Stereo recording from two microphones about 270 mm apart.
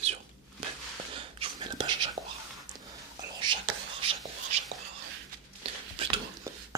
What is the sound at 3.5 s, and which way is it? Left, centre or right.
Whispering, centre.